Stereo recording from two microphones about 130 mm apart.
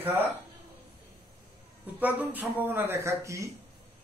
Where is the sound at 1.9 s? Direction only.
15° right (ahead or behind).